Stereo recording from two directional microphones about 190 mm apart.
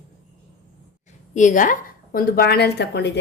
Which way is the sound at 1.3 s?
40° left (ahead or behind).